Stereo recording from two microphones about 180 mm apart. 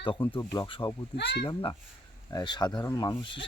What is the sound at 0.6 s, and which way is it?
Speech, 30° left (ahead or behind).